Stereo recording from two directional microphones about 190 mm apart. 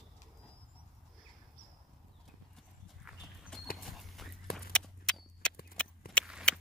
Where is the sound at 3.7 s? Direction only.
Centre (ahead or behind).